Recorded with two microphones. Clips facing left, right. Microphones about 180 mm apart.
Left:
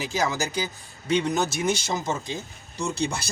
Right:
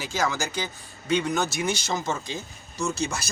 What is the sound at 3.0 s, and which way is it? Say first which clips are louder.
Speech: left 2 dB; 30° left (ahead or behind).